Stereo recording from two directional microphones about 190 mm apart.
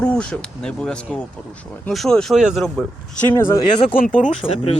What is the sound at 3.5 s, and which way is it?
Speech, 30° left (ahead or behind).